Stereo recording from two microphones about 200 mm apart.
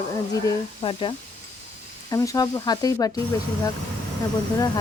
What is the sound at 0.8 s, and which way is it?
Speech, 25° left (ahead or behind).